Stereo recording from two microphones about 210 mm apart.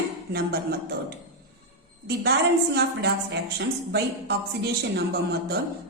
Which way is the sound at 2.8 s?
50° right (ahead or behind).